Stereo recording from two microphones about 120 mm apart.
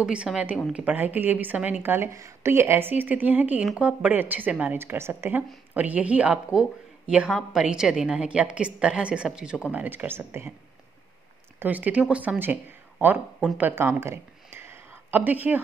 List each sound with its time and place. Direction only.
0.0 s a woman's voice: 10° right (ahead or behind)
11.6 s a woman's voice: 15° right (ahead or behind)
13.6 s a sound: 15° right (ahead or behind)